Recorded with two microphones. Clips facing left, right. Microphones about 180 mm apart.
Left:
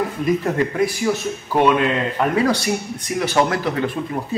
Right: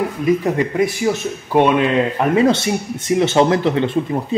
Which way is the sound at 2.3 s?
25° right (ahead or behind).